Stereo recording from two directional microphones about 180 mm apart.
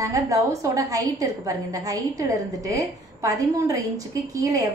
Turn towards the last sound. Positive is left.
turn(degrees=-20)  # may be behind; listen again after turning